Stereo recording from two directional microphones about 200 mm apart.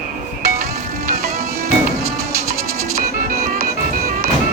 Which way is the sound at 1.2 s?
50° right (ahead or behind).